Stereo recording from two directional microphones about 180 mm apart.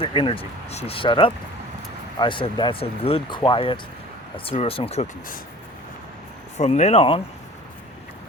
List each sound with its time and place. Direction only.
0.0 s speech: 30° left (ahead or behind)
6.6 s speech: 40° left (ahead or behind)